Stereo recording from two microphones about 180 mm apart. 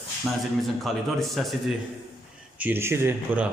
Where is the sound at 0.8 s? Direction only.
Centre (ahead or behind).